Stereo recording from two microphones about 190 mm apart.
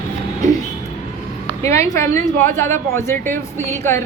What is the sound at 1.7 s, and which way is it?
A woman's voice, 15° left (ahead or behind).